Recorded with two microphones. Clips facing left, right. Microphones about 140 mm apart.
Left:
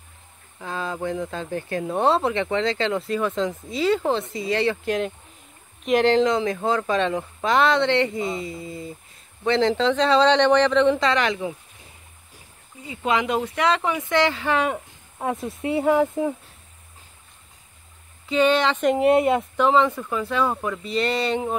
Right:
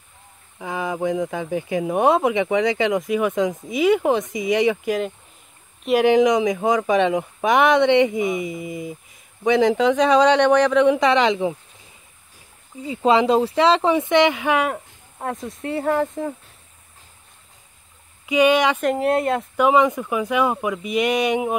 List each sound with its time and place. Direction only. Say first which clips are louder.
0.6 s speech: right 4 dB; 15° right (ahead or behind)
11.1 s speech: right 5 dB; 25° right (ahead or behind)
12.8 s speech: right 7 dB; 30° right (ahead or behind); by 14.7 s 15° right (ahead or behind)
14.7 s a sound: even; centre (ahead or behind)
15.4 s speech: left 2 dB; centre (ahead or behind)
18.2 s speech: right 3 dB; 15° right (ahead or behind)
18.8 s speech: left 2 dB; centre (ahead or behind)
19.5 s speech: right 6 dB; 10° right (ahead or behind)